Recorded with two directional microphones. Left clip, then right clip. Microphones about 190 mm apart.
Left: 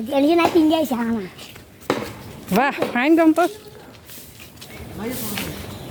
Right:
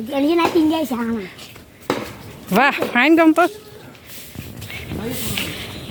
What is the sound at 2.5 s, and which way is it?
Speech, centre (ahead or behind).